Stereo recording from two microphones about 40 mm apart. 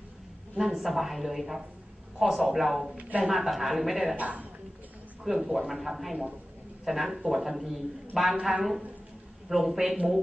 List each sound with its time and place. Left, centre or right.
0.6 s a man's voice: centre
4.2 s a woman's voice: right
5.2 s a man's voice: centre